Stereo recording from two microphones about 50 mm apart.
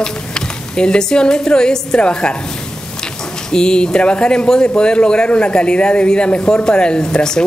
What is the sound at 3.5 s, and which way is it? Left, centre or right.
Speech, centre.